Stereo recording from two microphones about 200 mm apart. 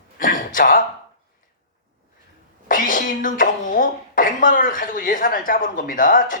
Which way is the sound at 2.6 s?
40° left (ahead or behind).